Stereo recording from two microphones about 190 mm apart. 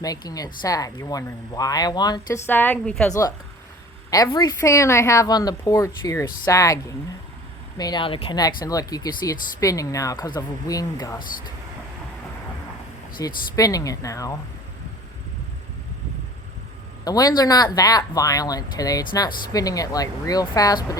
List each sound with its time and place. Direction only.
0.0 s speech: 20° left (ahead or behind)
2.5 s a woman's voice: 10° left (ahead or behind)
3.1 s a woman's voice: 20° left (ahead or behind)
13.2 s speech: 20° left (ahead or behind)
17.0 s speech: 20° left (ahead or behind)